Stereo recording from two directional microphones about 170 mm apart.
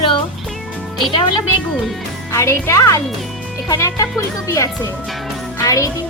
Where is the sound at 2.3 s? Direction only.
15° left (ahead or behind).